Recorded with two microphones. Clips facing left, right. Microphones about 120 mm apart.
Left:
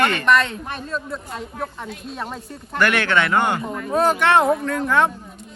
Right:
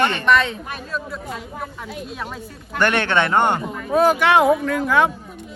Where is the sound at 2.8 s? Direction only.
25° right (ahead or behind).